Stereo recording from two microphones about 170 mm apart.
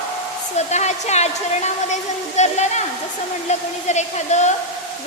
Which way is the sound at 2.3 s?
40° left (ahead or behind).